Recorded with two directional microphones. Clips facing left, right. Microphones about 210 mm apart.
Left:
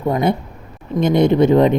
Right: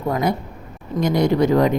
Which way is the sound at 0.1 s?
25° left (ahead or behind).